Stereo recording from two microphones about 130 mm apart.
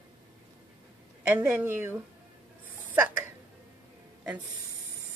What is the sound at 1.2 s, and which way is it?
Speech, 10° right (ahead or behind).